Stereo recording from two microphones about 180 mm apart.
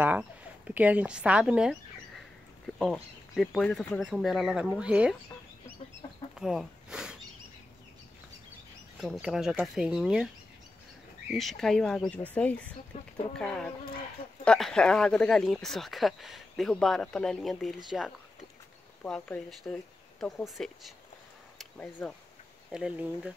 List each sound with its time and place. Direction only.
0.0 s speech: 10° right (ahead or behind)
6.3 s speech: 5° right (ahead or behind)
9.0 s speech: centre (ahead or behind)
11.3 s speech: centre (ahead or behind)
12.9 s speech: 35° left (ahead or behind)
14.4 s speech: 5° left (ahead or behind)